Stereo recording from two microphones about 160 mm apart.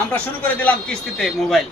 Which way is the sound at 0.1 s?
10° left (ahead or behind).